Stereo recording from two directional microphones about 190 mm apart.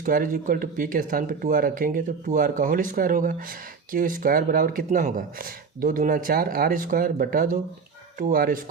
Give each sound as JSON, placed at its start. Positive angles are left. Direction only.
{"t": 0.0, "sound": "speech", "side_deg": -45}